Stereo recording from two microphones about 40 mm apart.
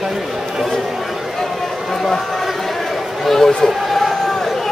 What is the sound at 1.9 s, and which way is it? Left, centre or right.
Run, centre.